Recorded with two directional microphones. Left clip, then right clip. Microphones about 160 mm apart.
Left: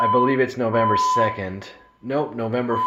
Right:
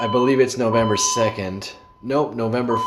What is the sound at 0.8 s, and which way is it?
Speech, 30° right (ahead or behind).